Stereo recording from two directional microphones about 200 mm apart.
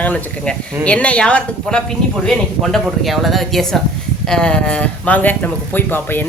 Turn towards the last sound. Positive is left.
turn(degrees=10)  # may be behind; listen again after turning